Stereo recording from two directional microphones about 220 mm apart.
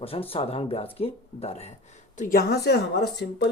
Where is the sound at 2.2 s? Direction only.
40° left (ahead or behind).